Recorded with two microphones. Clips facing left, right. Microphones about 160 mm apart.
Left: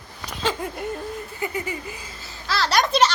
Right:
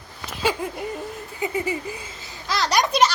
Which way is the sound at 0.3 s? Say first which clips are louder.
Right 2 dB; 5° right (ahead or behind).